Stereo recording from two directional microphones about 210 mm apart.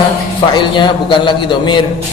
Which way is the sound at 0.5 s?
20° left (ahead or behind).